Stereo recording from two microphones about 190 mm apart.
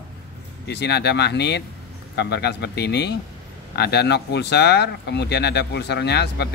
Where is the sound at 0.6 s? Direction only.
60° left (ahead or behind).